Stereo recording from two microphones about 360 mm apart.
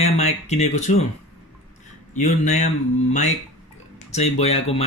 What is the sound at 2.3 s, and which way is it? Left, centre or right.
Speech, centre.